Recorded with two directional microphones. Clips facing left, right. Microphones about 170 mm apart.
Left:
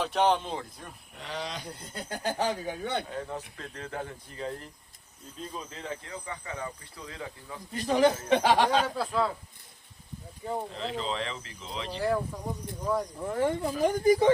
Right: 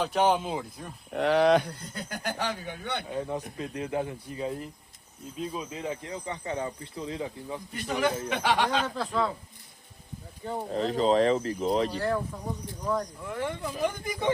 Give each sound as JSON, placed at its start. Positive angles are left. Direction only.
{"t": 0.0, "sound": "speech", "side_deg": 0}
{"t": 1.1, "sound": "speech", "side_deg": -65}
{"t": 1.8, "sound": "speech", "side_deg": 30}
{"t": 3.1, "sound": "speech", "side_deg": -15}
{"t": 6.4, "sound": "speech", "side_deg": -30}
{"t": 7.8, "sound": "speech", "side_deg": 30}
{"t": 9.0, "sound": "speech", "side_deg": 5}
{"t": 10.7, "sound": "speech", "side_deg": -45}
{"t": 11.9, "sound": "speech", "side_deg": 5}
{"t": 13.2, "sound": "speech", "side_deg": 35}